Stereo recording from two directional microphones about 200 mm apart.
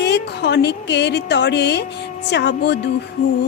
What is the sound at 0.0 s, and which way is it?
Speech, 55° left (ahead or behind).